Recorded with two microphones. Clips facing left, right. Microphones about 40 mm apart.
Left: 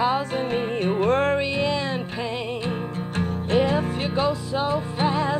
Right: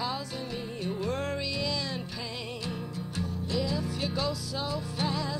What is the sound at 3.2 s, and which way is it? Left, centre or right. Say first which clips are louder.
Music: left 10 dB; left.